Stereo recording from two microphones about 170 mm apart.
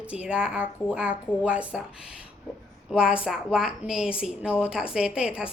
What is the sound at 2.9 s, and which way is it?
A woman's voice, 5° right (ahead or behind).